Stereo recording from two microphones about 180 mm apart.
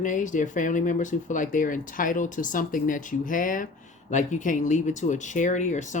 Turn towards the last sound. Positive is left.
turn(degrees=40)  # may be behind; listen again after turning